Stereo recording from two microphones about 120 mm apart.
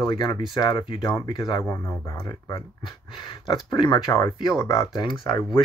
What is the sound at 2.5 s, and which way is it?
Speech, 40° left (ahead or behind).